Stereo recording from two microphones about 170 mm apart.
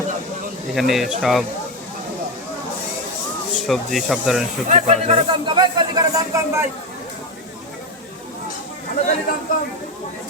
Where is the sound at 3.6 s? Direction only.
Centre (ahead or behind).